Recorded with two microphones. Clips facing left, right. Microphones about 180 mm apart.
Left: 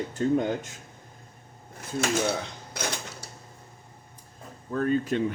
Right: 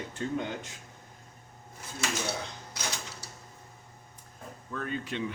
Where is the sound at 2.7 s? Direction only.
55° left (ahead or behind).